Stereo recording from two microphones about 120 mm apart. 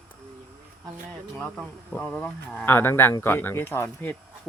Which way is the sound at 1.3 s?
10° left (ahead or behind).